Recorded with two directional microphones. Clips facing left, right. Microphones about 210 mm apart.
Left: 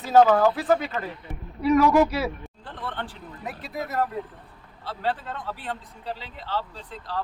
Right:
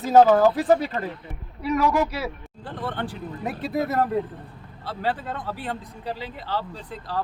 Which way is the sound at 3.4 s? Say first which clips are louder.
Right 7 dB; 30° right (ahead or behind).